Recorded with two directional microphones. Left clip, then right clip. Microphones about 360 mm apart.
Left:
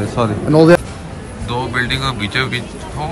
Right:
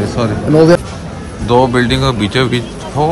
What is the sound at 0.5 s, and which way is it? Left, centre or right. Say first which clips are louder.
Speech: right 1 dB; centre.